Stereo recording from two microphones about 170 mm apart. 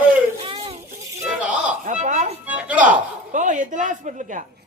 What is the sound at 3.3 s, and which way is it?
A woman's voice, 50° right (ahead or behind).